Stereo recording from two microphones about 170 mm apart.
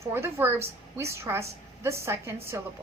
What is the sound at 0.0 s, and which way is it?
A woman's voice, 15° right (ahead or behind).